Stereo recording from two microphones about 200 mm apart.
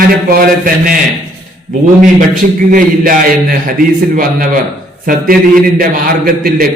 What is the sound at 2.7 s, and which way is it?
A man's voice, 45° right (ahead or behind).